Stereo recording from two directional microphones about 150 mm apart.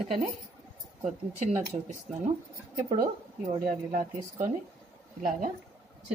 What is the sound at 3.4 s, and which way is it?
Speech, 60° right (ahead or behind).